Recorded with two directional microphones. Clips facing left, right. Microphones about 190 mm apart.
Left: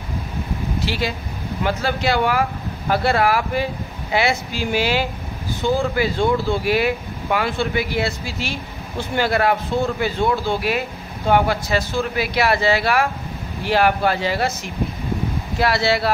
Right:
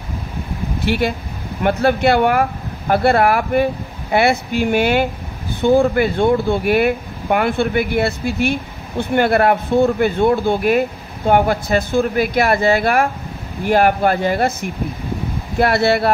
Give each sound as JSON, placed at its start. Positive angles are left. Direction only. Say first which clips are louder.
{"t": 0.7, "sound": "speech", "louder": "right 7 dB", "side_deg": -55}